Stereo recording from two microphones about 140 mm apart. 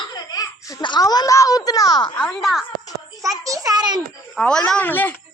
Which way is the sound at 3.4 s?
25° right (ahead or behind).